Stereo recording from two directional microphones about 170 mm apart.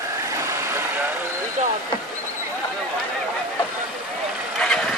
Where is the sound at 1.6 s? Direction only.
40° right (ahead or behind).